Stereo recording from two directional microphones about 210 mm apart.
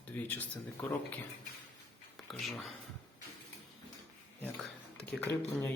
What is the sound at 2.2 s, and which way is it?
Speech, centre (ahead or behind).